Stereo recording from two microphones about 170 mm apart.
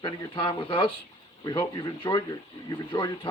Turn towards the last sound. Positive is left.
turn(degrees=25)  # may be behind; listen again after turning